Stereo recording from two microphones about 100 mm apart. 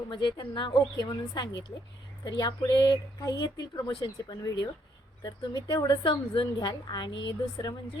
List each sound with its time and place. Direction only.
0.1 s a woman's voice: 50° left (ahead or behind)